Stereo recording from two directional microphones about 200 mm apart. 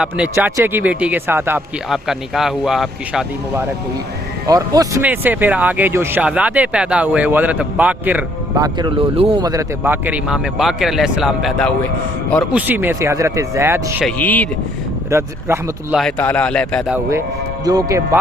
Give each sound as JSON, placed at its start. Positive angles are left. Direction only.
{"t": 0.0, "sound": "speech", "side_deg": -5}
{"t": 4.4, "sound": "speech", "side_deg": -20}
{"t": 12.5, "sound": "speech", "side_deg": -10}
{"t": 14.0, "sound": "speech", "side_deg": 10}
{"t": 15.1, "sound": "speech", "side_deg": -15}
{"t": 16.0, "sound": "speech", "side_deg": 5}
{"t": 16.9, "sound": "speech", "side_deg": -15}